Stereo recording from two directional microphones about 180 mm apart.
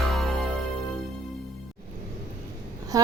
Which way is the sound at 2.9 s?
20° right (ahead or behind).